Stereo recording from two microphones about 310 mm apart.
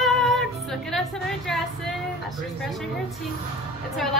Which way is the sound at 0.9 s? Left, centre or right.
Centre.